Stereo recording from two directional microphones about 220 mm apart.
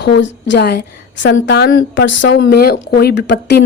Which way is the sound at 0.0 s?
50° left (ahead or behind).